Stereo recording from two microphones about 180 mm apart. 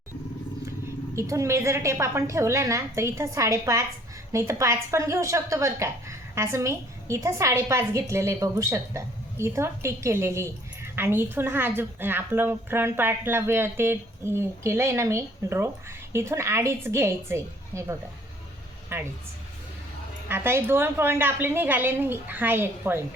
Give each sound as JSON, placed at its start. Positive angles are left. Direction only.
{"t": 1.1, "sound": "a woman's voice", "side_deg": -15}
{"t": 20.2, "sound": "a woman's voice", "side_deg": -15}